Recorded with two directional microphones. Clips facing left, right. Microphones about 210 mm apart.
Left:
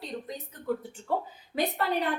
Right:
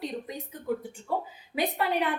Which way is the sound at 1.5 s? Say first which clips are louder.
Even; 10° right (ahead or behind).